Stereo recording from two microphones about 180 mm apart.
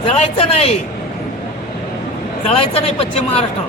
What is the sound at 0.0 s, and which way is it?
Speech, 35° left (ahead or behind).